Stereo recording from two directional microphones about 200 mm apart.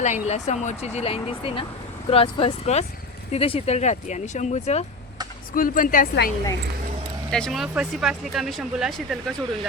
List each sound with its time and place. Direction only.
0.0 s speech: 35° left (ahead or behind)
5.5 s a woman's voice: 45° left (ahead or behind)
7.3 s speech: 5° left (ahead or behind)